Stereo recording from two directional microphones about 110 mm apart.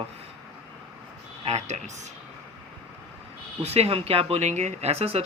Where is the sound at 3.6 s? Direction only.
65° right (ahead or behind).